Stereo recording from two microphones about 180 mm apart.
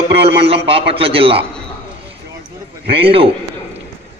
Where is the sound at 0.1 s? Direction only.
30° right (ahead or behind).